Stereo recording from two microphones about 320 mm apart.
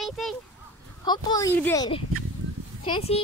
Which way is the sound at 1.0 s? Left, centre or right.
Centre.